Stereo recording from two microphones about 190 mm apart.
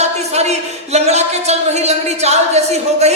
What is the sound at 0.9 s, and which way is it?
A woman's voice, 35° right (ahead or behind).